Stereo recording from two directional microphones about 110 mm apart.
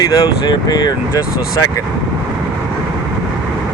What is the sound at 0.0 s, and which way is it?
Speech, 35° left (ahead or behind).